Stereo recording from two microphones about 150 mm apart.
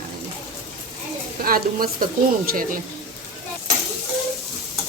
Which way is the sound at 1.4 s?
75° right (ahead or behind).